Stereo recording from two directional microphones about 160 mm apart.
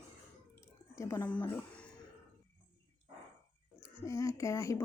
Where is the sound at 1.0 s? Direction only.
15° left (ahead or behind).